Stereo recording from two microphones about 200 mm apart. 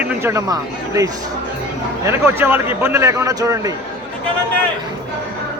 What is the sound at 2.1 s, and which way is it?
A man's voice, 10° right (ahead or behind).